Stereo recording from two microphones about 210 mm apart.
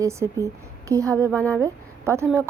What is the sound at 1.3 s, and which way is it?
Speech, 5° left (ahead or behind).